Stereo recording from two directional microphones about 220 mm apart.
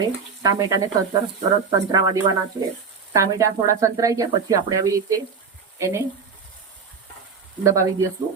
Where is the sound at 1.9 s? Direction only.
20° right (ahead or behind).